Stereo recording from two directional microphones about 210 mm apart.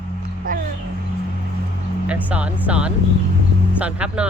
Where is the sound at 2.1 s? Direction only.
5° right (ahead or behind).